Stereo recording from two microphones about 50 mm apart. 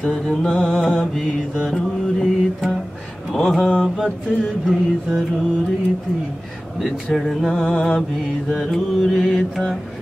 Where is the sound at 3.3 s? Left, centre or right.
Centre.